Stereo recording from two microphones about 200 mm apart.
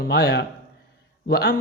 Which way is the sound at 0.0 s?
55° left (ahead or behind).